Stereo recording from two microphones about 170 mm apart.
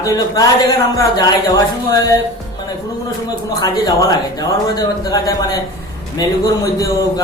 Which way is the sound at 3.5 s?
20° left (ahead or behind).